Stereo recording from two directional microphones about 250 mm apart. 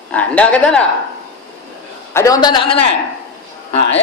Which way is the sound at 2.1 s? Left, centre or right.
Centre.